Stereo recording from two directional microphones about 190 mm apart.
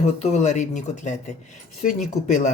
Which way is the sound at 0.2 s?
35° left (ahead or behind).